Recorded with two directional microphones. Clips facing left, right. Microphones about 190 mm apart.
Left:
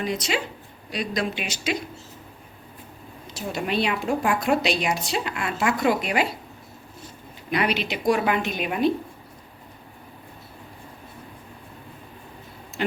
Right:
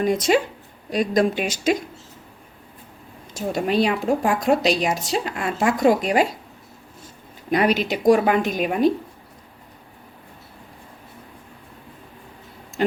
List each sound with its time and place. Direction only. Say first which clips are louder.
0.0 s speech: right 8 dB; 50° right (ahead or behind)
3.3 s a woman's voice: right 5 dB; 40° right (ahead or behind)
7.5 s a woman's voice: right 5 dB; 40° right (ahead or behind)